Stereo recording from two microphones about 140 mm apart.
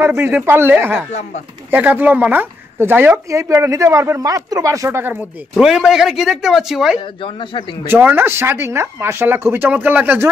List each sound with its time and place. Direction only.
0.2 s speech: 15° right (ahead or behind)
5.6 s speech: 5° right (ahead or behind)
7.8 s speech: 15° right (ahead or behind)